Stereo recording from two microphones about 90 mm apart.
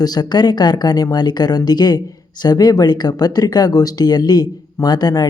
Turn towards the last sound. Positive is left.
turn(degrees=50)  # may be behind; listen again after turning